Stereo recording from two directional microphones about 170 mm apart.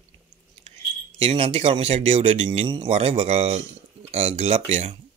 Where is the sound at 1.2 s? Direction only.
35° right (ahead or behind).